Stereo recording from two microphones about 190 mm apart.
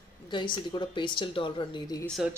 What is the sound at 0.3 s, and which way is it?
Speech, 25° left (ahead or behind).